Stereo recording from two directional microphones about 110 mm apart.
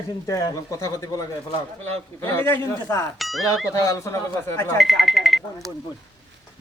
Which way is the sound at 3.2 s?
Centre (ahead or behind).